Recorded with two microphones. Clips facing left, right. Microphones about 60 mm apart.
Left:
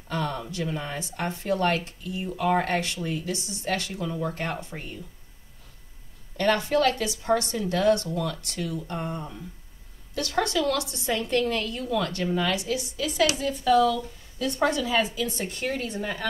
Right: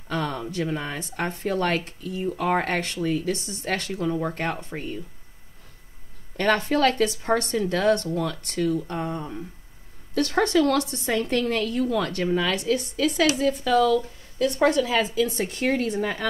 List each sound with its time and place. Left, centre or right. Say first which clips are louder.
0.1 s speech: right 2 dB; right
6.4 s speech: right 1 dB; right